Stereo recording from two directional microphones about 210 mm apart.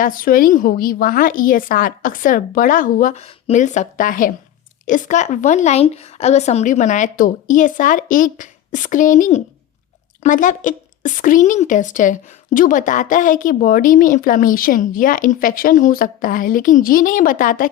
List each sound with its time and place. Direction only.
0.0 s a woman's voice: 40° left (ahead or behind)